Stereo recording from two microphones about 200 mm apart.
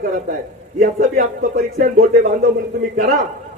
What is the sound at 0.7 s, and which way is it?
A man's voice, 45° right (ahead or behind).